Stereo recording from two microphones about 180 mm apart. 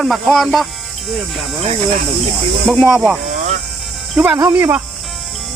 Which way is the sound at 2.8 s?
5° right (ahead or behind).